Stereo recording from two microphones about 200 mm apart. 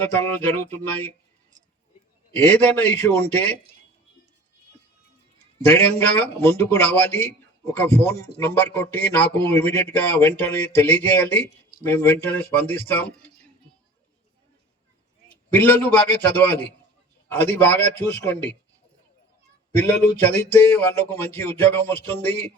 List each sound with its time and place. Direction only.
0.0 s a man's voice: 10° left (ahead or behind)
3.1 s a man's voice: 10° left (ahead or behind)
5.6 s a man's voice: 10° left (ahead or behind)
15.3 s a man's voice: 10° left (ahead or behind)
19.7 s a man's voice: 10° left (ahead or behind)